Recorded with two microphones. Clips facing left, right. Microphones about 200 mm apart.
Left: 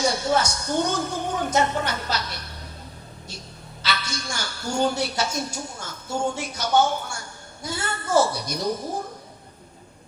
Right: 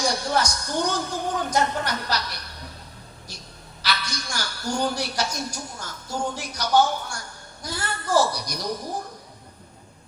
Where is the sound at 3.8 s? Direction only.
25° left (ahead or behind).